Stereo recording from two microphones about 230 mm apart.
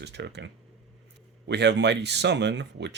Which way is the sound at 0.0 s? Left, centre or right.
Right.